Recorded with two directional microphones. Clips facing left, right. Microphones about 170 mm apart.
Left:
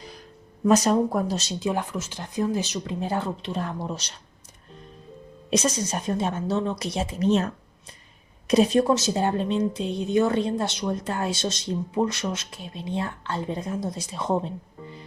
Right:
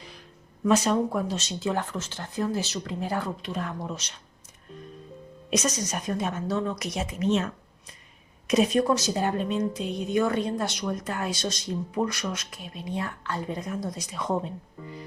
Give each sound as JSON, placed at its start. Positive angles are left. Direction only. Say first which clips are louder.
{"t": 0.0, "sound": "a sound", "louder": "left 4 dB", "side_deg": 40}
{"t": 1.5, "sound": "speech", "louder": "even", "side_deg": 15}
{"t": 5.5, "sound": "a woman's voice", "louder": "left 3 dB", "side_deg": 30}